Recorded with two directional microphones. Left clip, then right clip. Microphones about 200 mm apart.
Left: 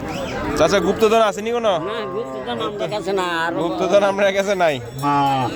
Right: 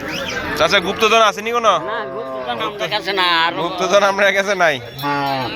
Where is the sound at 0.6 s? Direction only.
30° left (ahead or behind).